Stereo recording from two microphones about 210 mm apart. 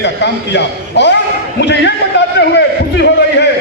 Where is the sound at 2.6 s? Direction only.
55° left (ahead or behind).